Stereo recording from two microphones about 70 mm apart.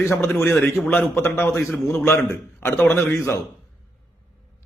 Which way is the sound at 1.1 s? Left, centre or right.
Left.